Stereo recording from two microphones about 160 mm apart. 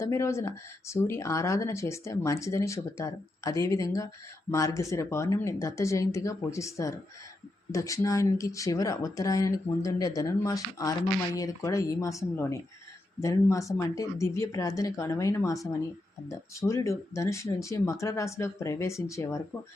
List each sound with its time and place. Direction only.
0.0 s speech: 20° left (ahead or behind)